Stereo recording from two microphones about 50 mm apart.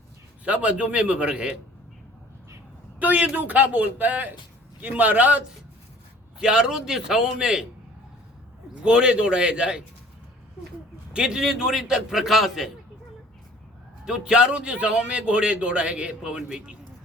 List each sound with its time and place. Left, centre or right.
0.4 s a man's voice: right
3.0 s speech: right
6.4 s a man's voice: centre
8.8 s a man's voice: centre
11.1 s a man's voice: centre
14.0 s a man's voice: centre